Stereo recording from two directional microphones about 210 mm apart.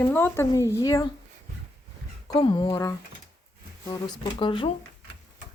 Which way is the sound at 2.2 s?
20° left (ahead or behind).